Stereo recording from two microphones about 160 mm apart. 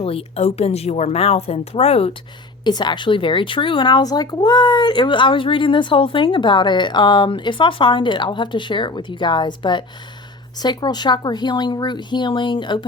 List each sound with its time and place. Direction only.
0.0 s speech: 35° left (ahead or behind)
2.6 s speech: 25° left (ahead or behind)